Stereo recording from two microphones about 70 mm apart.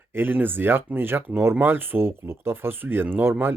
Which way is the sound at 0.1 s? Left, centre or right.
Right.